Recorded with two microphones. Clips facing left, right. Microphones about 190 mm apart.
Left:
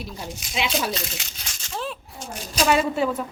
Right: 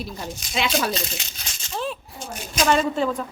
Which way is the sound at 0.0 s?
10° left (ahead or behind).